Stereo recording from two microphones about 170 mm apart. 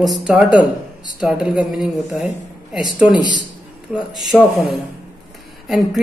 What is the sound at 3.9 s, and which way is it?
Speech, centre (ahead or behind).